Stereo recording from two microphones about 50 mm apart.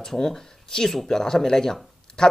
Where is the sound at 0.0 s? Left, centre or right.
Centre.